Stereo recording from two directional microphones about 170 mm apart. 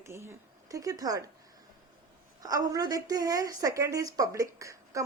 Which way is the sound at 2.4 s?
20° right (ahead or behind).